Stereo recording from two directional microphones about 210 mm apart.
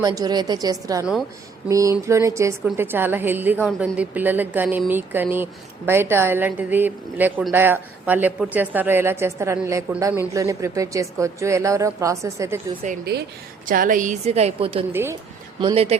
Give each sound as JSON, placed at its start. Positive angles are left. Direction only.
{"t": 0.0, "sound": "a woman's voice", "side_deg": -15}
{"t": 13.1, "sound": "a woman's voice", "side_deg": -50}